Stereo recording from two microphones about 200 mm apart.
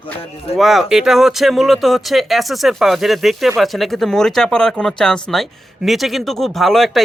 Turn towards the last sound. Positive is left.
turn(degrees=0)  # may be behind; listen again after turning